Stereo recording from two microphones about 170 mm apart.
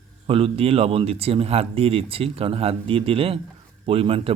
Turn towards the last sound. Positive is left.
turn(degrees=-35)  # may be behind; listen again after turning